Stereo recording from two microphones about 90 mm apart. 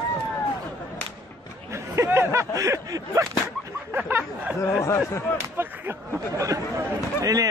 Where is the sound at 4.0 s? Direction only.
20° right (ahead or behind).